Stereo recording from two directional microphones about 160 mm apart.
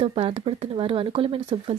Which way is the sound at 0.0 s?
35° right (ahead or behind).